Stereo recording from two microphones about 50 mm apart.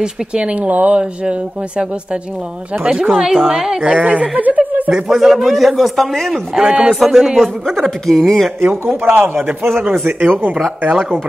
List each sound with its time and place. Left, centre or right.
0.0 s speech: centre
2.8 s a man's voice: centre
3.3 s speech: centre
3.8 s speech: right
4.9 s speech: centre
6.5 s a man's voice: centre
7.3 s speech: centre
8.5 s a man's voice: right
9.8 s speech: right
10.2 s a man's voice: right